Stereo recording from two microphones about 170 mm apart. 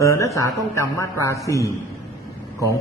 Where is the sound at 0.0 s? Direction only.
15° left (ahead or behind).